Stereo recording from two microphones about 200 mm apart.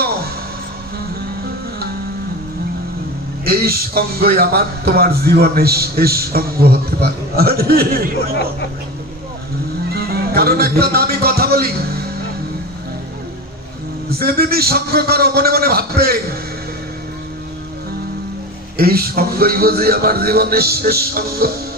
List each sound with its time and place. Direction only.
3.4 s speech: 50° right (ahead or behind)
9.9 s music: 50° right (ahead or behind)
14.1 s speech: 50° right (ahead or behind)
18.8 s speech: 50° right (ahead or behind)